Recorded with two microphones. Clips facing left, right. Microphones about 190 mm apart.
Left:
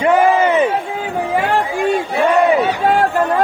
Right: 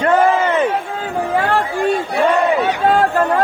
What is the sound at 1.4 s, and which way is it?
Chatter, 15° left (ahead or behind).